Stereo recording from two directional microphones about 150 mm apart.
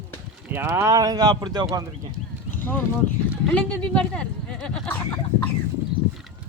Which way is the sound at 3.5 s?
10° left (ahead or behind).